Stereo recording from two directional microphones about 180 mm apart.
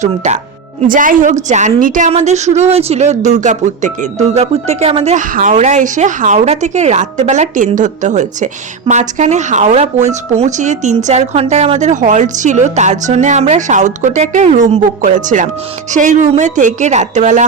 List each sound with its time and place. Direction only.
0.2 s a woman's voice: 40° right (ahead or behind)